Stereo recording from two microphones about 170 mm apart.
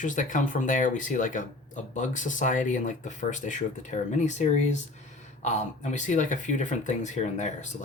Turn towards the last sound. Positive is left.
turn(degrees=45)  # may be behind; listen again after turning